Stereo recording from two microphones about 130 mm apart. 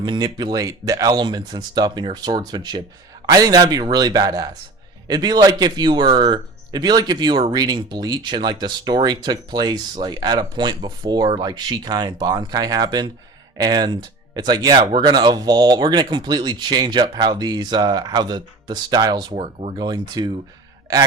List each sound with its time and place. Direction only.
0.0 s a man's voice: 35° right (ahead or behind)